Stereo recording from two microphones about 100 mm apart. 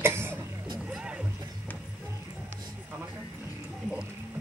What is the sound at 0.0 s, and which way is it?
Cough, 25° right (ahead or behind).